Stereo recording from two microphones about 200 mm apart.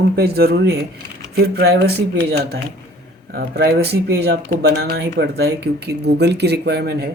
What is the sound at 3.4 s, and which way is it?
Speech, 50° right (ahead or behind).